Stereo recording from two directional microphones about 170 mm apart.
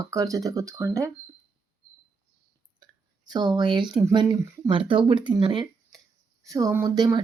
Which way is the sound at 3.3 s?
25° right (ahead or behind).